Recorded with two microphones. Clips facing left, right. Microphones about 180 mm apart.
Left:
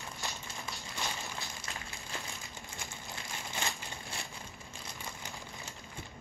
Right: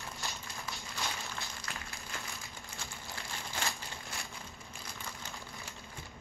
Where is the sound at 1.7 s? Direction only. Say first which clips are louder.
Even; 20° left (ahead or behind).